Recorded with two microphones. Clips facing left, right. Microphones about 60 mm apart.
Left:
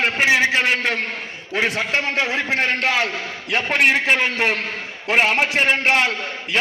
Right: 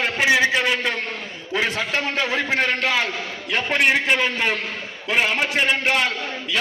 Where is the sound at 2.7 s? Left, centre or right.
Left.